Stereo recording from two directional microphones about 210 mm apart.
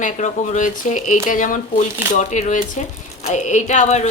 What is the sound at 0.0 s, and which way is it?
Speech, 35° left (ahead or behind).